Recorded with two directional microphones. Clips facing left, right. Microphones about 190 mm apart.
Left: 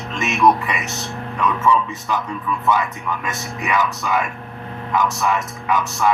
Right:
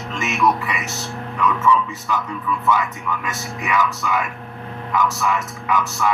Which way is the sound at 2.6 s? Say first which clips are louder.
Left 1 dB; 35° left (ahead or behind).